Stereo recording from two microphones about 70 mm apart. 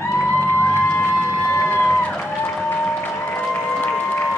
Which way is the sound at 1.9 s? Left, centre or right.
Left.